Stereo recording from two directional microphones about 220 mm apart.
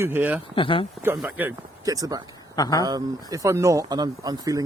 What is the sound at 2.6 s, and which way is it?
Speech, 15° left (ahead or behind).